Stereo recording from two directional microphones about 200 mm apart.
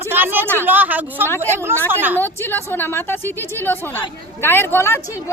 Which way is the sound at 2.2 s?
10° left (ahead or behind).